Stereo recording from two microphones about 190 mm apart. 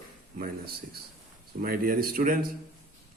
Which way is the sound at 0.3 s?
50° right (ahead or behind).